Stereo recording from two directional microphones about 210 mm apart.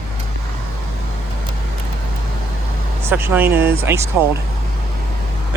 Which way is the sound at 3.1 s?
10° right (ahead or behind).